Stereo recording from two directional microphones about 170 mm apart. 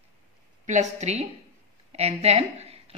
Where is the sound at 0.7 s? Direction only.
45° right (ahead or behind).